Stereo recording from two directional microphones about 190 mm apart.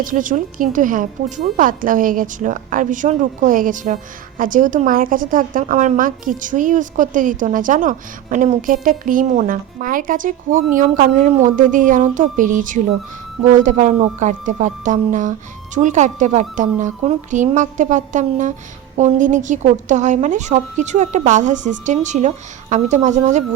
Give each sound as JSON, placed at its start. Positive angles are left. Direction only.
{"t": 0.0, "sound": "a woman's voice", "side_deg": -45}